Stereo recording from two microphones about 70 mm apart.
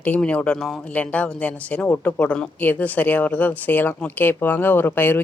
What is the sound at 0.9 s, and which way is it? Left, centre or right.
A woman's voice, left.